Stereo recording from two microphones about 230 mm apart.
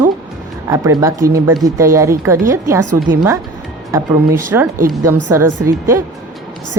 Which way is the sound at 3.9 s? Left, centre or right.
Centre.